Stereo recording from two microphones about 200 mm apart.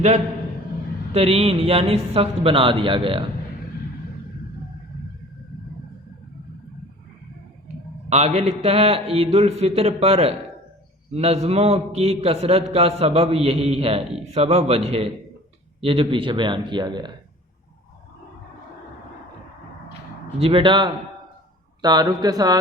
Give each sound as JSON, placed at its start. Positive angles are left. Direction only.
{"t": 1.1, "sound": "speech", "side_deg": -30}
{"t": 8.1, "sound": "a man's voice", "side_deg": -35}
{"t": 20.4, "sound": "speech", "side_deg": -25}